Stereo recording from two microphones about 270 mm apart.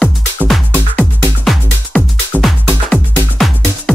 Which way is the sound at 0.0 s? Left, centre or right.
Centre.